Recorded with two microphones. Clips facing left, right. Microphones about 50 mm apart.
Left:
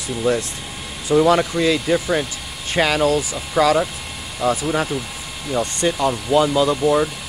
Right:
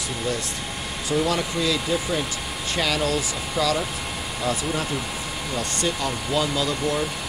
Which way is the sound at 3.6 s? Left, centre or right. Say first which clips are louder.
Left 8 dB; centre.